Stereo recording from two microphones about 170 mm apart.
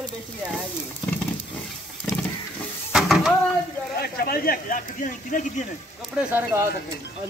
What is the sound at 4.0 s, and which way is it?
Speech, 60° left (ahead or behind).